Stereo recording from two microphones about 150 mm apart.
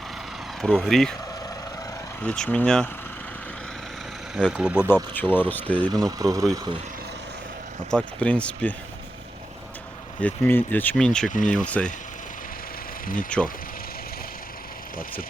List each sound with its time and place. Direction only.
0.6 s speech: centre (ahead or behind)
2.2 s speech: 5° left (ahead or behind)
4.5 s speech: 10° right (ahead or behind)
5.1 s speech: 10° left (ahead or behind)
5.9 s speech: 25° right (ahead or behind)
7.9 s speech: 5° left (ahead or behind)
10.2 s speech: 10° left (ahead or behind)
11.3 s speech: 60° left (ahead or behind)
11.5 s speech: 10° left (ahead or behind)
13.3 s speech: 5° left (ahead or behind)